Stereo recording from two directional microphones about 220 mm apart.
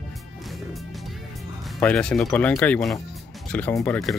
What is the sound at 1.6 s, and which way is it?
Speech, 5° left (ahead or behind).